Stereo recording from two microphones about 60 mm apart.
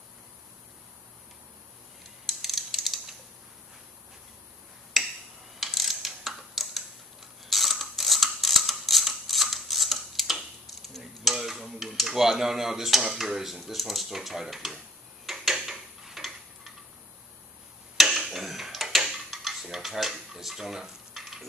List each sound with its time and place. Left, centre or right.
2.2 s mechanisms: centre
5.6 s mechanisms: centre
17.9 s a sound: centre